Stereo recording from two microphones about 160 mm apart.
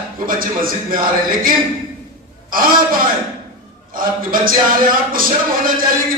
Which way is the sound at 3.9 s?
60° right (ahead or behind).